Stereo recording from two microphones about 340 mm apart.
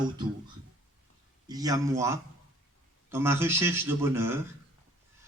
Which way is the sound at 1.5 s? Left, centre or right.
Centre.